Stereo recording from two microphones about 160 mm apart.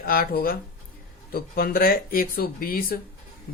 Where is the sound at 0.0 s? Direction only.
65° left (ahead or behind).